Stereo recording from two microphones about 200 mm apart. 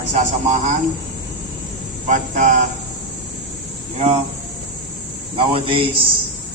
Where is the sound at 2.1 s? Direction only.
40° right (ahead or behind).